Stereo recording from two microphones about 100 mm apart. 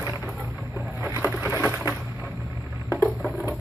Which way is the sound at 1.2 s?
15° right (ahead or behind).